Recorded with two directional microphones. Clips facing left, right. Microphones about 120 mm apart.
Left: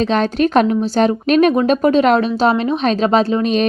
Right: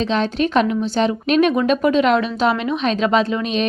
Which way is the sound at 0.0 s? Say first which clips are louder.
Left 4 dB; 50° left (ahead or behind).